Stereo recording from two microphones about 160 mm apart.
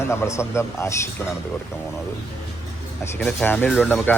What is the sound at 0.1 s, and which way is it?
Speech, 15° left (ahead or behind).